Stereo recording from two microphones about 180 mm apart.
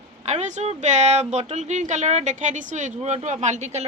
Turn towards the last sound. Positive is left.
turn(degrees=-40)  # may be behind; listen again after turning